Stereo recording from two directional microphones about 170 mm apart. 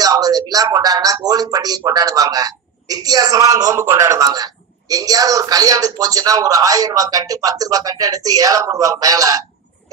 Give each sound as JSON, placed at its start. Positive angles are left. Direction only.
{"t": 0.0, "sound": "a woman's voice", "side_deg": -20}